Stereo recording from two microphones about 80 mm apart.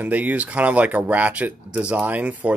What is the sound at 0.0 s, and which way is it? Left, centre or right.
Speech, centre.